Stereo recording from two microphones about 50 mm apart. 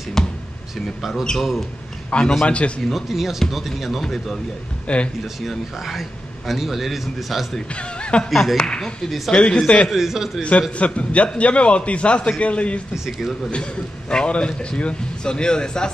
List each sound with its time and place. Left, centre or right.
0.2 s a sound: centre
0.8 s a man's voice: centre
2.0 s a man's voice: left
2.8 s a man's voice: centre
4.8 s speech: left
5.2 s a man's voice: centre
7.7 s speech: left
8.3 s a man's voice: centre
8.5 s a man's voice: centre
9.8 s a man's voice: centre
10.8 s a man's voice: left
12.9 s speech: centre
13.5 s a man's voice: centre